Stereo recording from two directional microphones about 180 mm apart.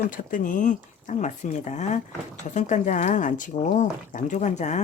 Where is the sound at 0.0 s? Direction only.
50° left (ahead or behind).